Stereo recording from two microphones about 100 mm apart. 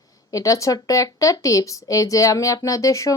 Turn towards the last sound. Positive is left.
turn(degrees=30)  # may be behind; listen again after turning